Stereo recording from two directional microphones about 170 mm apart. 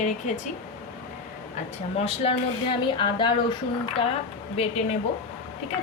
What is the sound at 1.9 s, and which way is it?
Speech, 35° left (ahead or behind).